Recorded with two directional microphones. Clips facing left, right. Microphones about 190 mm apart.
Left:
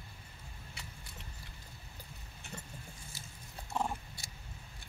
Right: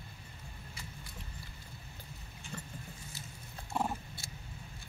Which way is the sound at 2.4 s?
65° left (ahead or behind).